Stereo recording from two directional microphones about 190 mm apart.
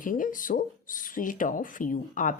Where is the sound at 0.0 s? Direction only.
45° left (ahead or behind).